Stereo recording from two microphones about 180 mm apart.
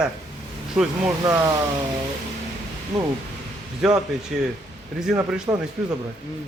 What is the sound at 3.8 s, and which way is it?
Speech, centre (ahead or behind).